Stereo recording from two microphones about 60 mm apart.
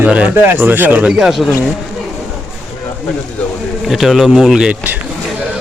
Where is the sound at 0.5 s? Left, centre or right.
Right.